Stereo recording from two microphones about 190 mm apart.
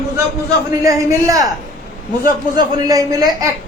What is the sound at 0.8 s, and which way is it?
A man's voice, 20° right (ahead or behind).